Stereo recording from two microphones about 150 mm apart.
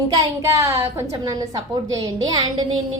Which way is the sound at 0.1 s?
20° right (ahead or behind).